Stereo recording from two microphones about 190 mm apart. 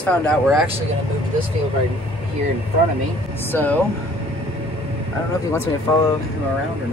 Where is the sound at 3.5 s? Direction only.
10° left (ahead or behind).